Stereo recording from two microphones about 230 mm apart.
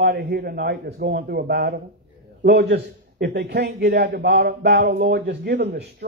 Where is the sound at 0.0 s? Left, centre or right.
Right.